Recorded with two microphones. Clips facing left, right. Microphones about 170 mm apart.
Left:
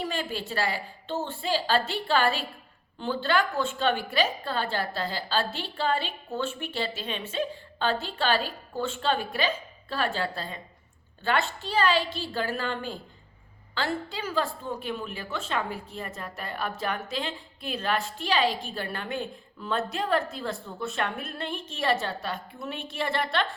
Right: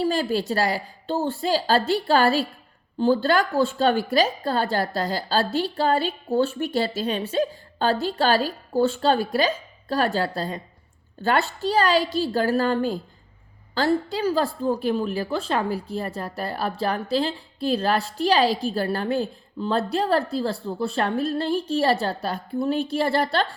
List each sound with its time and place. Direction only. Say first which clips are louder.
0.0 s a woman's voice: right 9 dB; 35° right (ahead or behind)